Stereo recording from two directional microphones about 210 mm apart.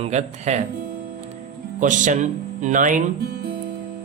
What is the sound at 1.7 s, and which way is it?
Speech, 40° right (ahead or behind).